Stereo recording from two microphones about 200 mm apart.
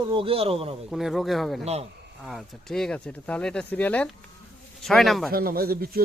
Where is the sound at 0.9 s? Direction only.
Centre (ahead or behind).